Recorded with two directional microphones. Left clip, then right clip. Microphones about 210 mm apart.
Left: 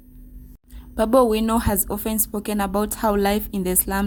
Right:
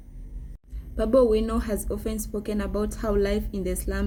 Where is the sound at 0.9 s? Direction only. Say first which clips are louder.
Left 3 dB; 45° left (ahead or behind).